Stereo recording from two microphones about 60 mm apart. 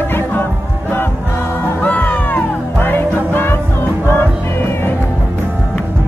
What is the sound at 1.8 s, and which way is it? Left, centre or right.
Music, left.